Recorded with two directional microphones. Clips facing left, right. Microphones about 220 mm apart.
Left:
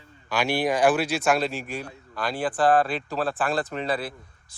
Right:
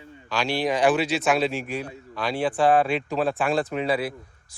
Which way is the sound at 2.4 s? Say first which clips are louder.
Right 1 dB; 10° right (ahead or behind).